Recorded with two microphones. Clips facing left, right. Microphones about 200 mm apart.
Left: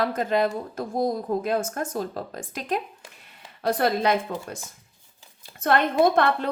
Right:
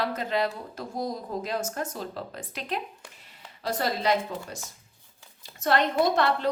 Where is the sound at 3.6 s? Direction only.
55° left (ahead or behind).